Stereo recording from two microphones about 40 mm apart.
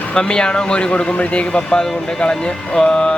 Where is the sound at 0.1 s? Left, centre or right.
Left.